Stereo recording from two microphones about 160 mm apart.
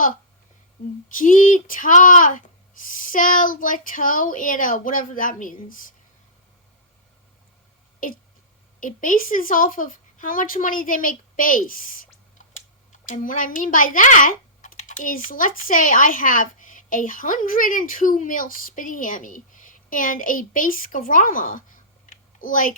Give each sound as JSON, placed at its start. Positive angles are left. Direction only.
{"t": 1.1, "sound": "speech", "side_deg": 55}
{"t": 8.8, "sound": "speech", "side_deg": 55}
{"t": 13.1, "sound": "speech", "side_deg": 55}
{"t": 22.1, "sound": "a sound", "side_deg": 55}